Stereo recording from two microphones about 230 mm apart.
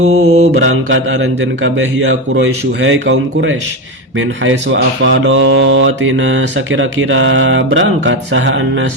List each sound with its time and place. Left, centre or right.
0.2 s mantra: right